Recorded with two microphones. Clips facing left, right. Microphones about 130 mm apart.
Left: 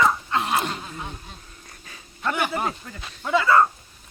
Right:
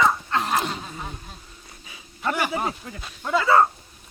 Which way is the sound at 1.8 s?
10° right (ahead or behind).